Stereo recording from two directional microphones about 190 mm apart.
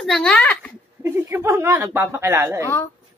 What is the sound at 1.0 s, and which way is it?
Speech, 10° right (ahead or behind).